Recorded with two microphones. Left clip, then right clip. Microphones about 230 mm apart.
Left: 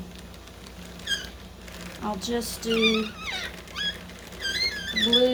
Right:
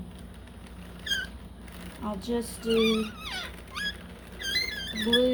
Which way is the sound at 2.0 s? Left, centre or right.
Left.